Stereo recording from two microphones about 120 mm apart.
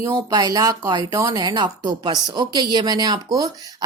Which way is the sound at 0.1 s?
30° right (ahead or behind).